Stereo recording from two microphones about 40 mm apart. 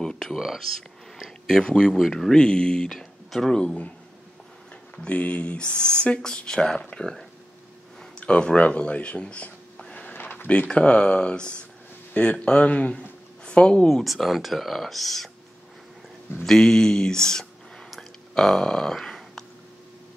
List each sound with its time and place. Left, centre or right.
0.0 s a sound: centre
1.6 s speech: centre
2.0 s speech: centre
2.3 s speech: left
2.9 s speech: centre
5.1 s speech: left; by 7.2 s centre
8.3 s speech: left
8.5 s speech: left
9.8 s a sound: left
10.1 s a sound: left
10.7 s speech: left
13.8 s speech: centre
16.4 s speech: centre